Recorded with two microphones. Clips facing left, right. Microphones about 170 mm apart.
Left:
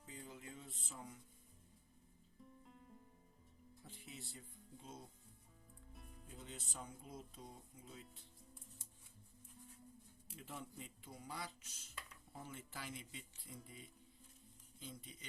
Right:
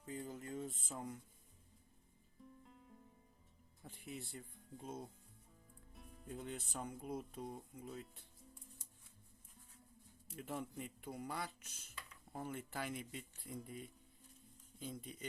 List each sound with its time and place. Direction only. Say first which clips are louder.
0.0 s music: right 7 dB; 50° right (ahead or behind)
2.6 s music: left 1 dB; centre (ahead or behind)
3.8 s speech: right 6 dB; 55° right (ahead or behind)
5.9 s music: right 1 dB; centre (ahead or behind)
6.2 s speech: right 8 dB; 55° right (ahead or behind)
10.4 s speech: right 7 dB; 55° right (ahead or behind)